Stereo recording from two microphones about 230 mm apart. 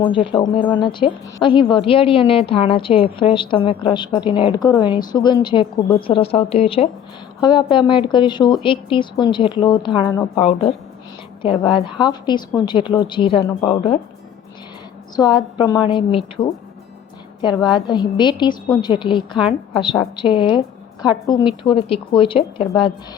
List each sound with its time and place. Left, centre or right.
0.0 s speech: left
15.1 s speech: centre